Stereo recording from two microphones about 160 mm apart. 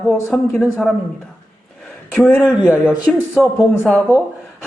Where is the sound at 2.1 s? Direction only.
10° left (ahead or behind).